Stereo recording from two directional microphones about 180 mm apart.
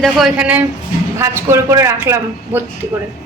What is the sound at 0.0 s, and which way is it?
A man's voice, centre (ahead or behind).